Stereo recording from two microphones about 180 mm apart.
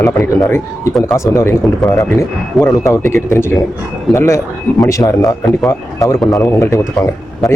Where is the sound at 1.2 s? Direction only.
15° left (ahead or behind).